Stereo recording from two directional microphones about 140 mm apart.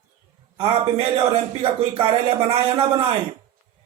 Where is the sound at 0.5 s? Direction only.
40° right (ahead or behind).